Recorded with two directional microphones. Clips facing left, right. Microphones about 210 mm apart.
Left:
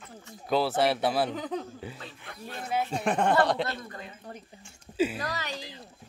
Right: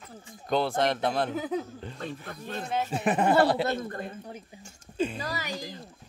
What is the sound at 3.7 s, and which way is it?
Speech, 50° right (ahead or behind).